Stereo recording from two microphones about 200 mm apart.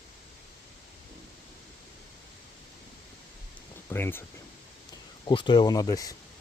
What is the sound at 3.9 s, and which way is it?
Speech, 10° left (ahead or behind).